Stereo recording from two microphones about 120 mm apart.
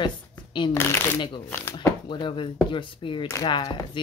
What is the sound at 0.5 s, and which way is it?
Speech, 40° left (ahead or behind).